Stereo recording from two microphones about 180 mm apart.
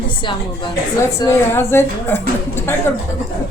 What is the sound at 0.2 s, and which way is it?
Speech, 25° left (ahead or behind).